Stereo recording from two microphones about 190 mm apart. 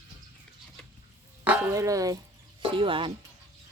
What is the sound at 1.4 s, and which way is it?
Speech, 10° right (ahead or behind).